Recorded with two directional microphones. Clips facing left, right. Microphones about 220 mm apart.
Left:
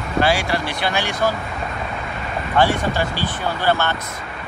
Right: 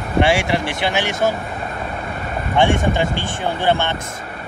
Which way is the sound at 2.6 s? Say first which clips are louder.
Right 3 dB; 25° right (ahead or behind).